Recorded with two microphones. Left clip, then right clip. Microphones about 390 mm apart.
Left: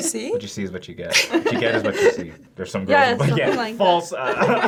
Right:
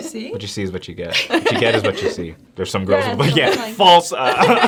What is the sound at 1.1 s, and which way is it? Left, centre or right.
Speech, left.